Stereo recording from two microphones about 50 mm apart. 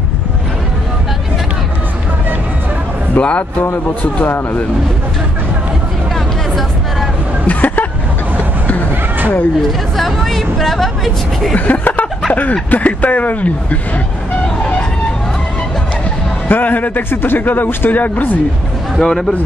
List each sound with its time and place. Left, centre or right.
3.2 s a man's voice: left
6.1 s vehicle: centre
7.4 s vehicle: left
9.7 s speech: centre
11.5 s speech: left
16.4 s speech: left
18.9 s speech: centre